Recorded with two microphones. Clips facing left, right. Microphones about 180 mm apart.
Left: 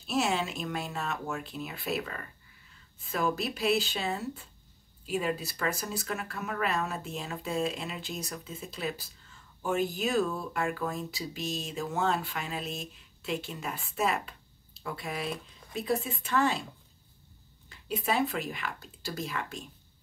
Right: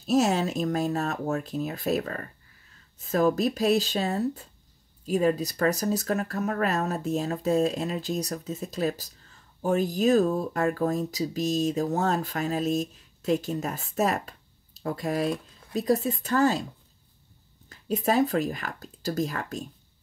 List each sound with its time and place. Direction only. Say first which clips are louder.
0.0 s speech: right 7 dB; 40° right (ahead or behind)
17.6 s speech: right 6 dB; 45° right (ahead or behind)